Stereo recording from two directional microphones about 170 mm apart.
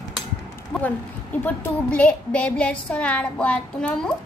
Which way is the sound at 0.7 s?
5° left (ahead or behind).